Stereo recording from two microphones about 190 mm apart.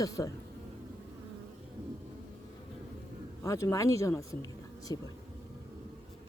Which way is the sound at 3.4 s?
15° left (ahead or behind).